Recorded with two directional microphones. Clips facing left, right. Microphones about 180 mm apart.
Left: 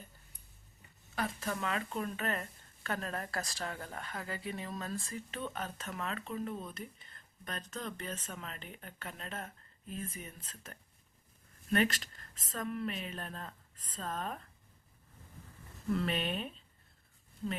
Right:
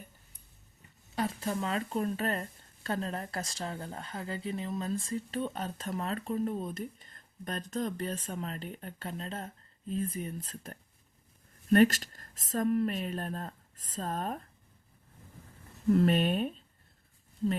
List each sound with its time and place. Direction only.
1.1 s speech: 25° right (ahead or behind); by 14.4 s 40° right (ahead or behind)
15.9 s speech: 45° right (ahead or behind)